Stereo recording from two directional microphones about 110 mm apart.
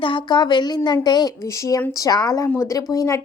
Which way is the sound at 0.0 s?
50° left (ahead or behind).